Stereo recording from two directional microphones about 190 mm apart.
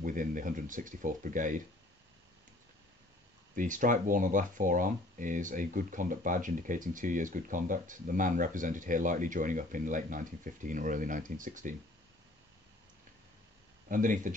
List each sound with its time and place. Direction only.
0.0 s speech: 45° right (ahead or behind)
3.5 s speech: 45° right (ahead or behind)
13.8 s speech: 45° right (ahead or behind)